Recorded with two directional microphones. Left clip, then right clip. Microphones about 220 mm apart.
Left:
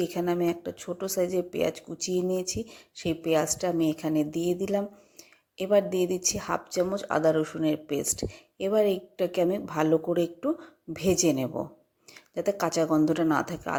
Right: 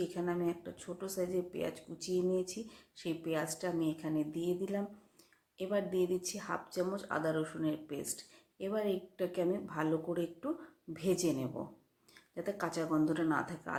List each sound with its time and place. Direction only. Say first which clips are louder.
0.0 s speech: left 9 dB; 35° left (ahead or behind)